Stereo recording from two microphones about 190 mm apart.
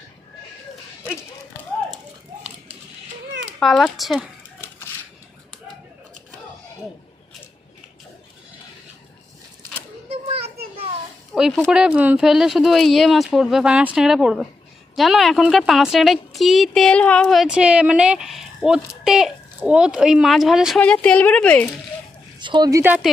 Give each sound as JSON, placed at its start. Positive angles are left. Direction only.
{"t": 3.6, "sound": "speech", "side_deg": 0}
{"t": 10.1, "sound": "children playing", "side_deg": -30}
{"t": 11.3, "sound": "speech", "side_deg": -5}
{"t": 22.4, "sound": "a woman's voice", "side_deg": -25}